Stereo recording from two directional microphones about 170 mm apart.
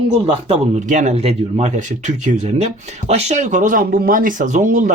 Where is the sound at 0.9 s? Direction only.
45° right (ahead or behind).